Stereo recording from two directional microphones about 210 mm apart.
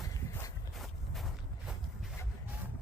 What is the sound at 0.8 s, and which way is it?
Walk, centre (ahead or behind).